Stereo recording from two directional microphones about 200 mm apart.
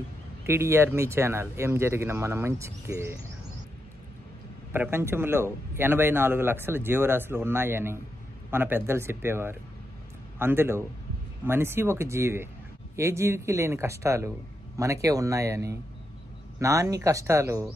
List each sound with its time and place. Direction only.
0.5 s speech: 10° right (ahead or behind)
4.7 s speech: 10° right (ahead or behind)